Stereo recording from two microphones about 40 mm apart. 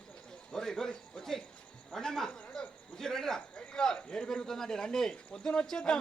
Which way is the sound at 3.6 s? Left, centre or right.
Centre.